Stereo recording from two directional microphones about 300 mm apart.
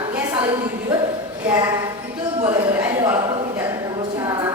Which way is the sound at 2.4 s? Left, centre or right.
Centre.